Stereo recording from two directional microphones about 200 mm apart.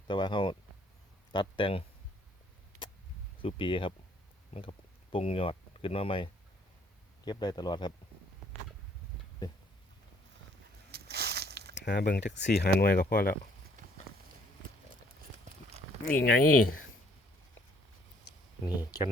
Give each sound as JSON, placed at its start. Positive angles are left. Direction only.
{"t": 0.1, "sound": "speech", "side_deg": 25}
{"t": 3.4, "sound": "speech", "side_deg": 25}
{"t": 5.1, "sound": "speech", "side_deg": 30}
{"t": 10.9, "sound": "a sound", "side_deg": -55}
{"t": 11.7, "sound": "speech", "side_deg": 55}
{"t": 16.0, "sound": "speech", "side_deg": 45}
{"t": 18.6, "sound": "speech", "side_deg": 20}